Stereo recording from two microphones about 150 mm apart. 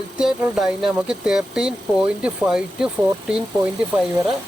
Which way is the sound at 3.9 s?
10° right (ahead or behind).